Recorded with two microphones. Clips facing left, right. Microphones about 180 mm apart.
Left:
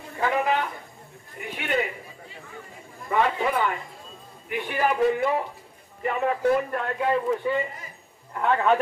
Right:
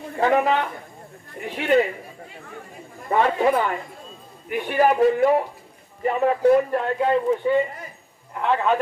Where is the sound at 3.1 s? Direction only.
40° right (ahead or behind).